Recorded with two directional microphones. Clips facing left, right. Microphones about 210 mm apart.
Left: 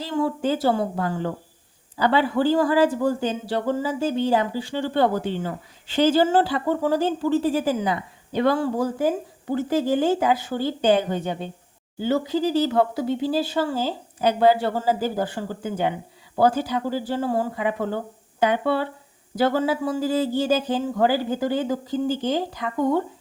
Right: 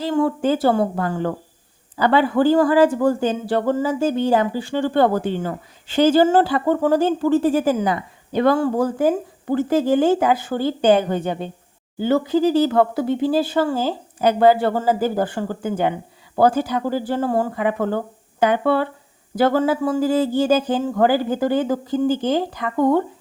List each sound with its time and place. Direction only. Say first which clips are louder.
0.0 s speech: right 4 dB; 55° right (ahead or behind)